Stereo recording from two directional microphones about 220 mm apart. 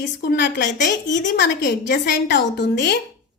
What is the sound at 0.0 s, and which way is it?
A woman's voice, 50° left (ahead or behind).